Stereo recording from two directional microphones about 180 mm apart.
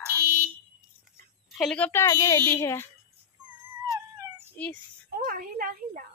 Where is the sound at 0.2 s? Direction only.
50° right (ahead or behind).